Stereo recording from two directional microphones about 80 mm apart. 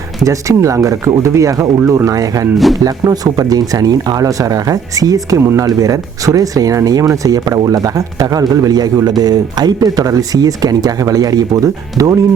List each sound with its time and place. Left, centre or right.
0.3 s speech: right